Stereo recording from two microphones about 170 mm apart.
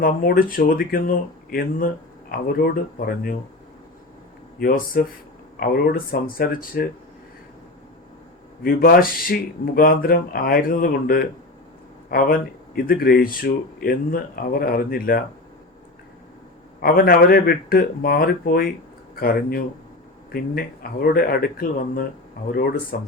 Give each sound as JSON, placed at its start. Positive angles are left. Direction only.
{"t": 0.0, "sound": "speech", "side_deg": 55}
{"t": 4.6, "sound": "speech", "side_deg": 55}
{"t": 8.6, "sound": "speech", "side_deg": 60}
{"t": 16.8, "sound": "speech", "side_deg": 60}